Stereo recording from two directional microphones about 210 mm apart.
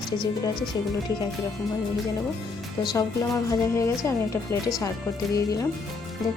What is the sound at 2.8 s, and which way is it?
Music, 15° left (ahead or behind).